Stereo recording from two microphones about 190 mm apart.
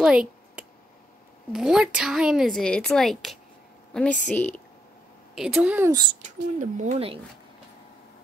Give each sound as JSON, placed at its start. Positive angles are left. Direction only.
{"t": 0.0, "sound": "a sound", "side_deg": -5}
{"t": 1.5, "sound": "a woman's voice", "side_deg": -5}
{"t": 5.3, "sound": "a woman's voice", "side_deg": 0}
{"t": 5.9, "sound": "a child's voice", "side_deg": -20}
{"t": 6.2, "sound": "speech", "side_deg": -40}